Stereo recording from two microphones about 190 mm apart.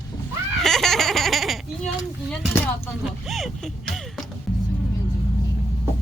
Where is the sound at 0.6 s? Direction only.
Centre (ahead or behind).